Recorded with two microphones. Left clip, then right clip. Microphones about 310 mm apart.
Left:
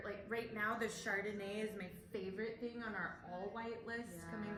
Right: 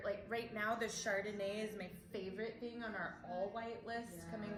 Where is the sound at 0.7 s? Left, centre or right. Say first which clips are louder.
Right 1 dB; centre.